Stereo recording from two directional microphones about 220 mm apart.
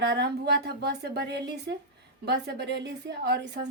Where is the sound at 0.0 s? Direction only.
50° right (ahead or behind).